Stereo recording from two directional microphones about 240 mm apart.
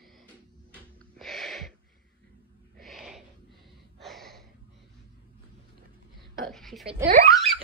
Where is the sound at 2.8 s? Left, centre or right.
Centre.